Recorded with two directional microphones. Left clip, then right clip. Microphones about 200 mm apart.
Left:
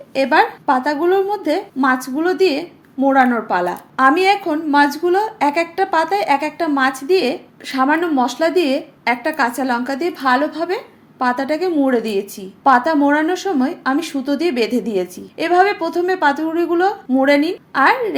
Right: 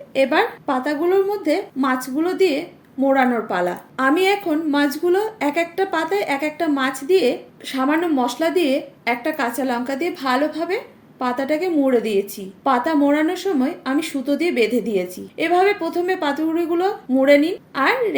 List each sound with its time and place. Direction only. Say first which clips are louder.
0.1 s a woman's voice: left 3 dB; 20° left (ahead or behind)